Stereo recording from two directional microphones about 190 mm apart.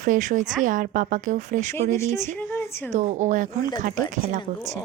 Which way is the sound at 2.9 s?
40° right (ahead or behind).